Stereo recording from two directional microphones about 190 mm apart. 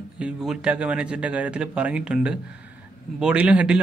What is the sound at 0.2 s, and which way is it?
A man's voice, 5° right (ahead or behind).